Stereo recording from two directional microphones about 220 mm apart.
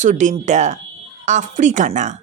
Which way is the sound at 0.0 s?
35° right (ahead or behind).